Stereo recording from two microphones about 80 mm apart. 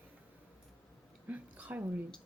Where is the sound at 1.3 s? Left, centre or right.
Centre.